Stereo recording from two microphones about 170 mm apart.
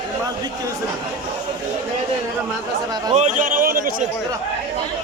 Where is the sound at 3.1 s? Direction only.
45° right (ahead or behind).